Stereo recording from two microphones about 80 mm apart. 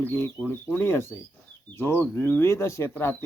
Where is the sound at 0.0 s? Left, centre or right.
Left.